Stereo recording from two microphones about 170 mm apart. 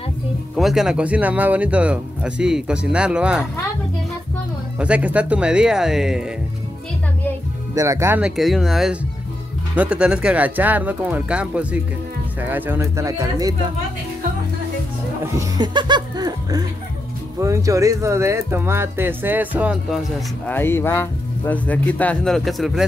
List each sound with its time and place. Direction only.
0.6 s speech: centre (ahead or behind)
4.7 s speech: 5° right (ahead or behind)
7.7 s speech: 20° right (ahead or behind)
8.4 s speech: centre (ahead or behind); by 13.6 s 20° right (ahead or behind)
15.3 s speech: 25° right (ahead or behind); by 20.0 s 10° right (ahead or behind)
20.4 s speech: 10° left (ahead or behind)